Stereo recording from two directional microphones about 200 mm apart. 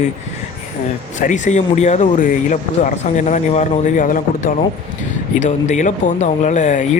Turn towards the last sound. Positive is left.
turn(degrees=35)  # may be behind; listen again after turning